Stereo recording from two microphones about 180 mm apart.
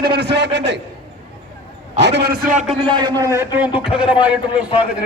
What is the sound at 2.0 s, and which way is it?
Speech, 70° right (ahead or behind).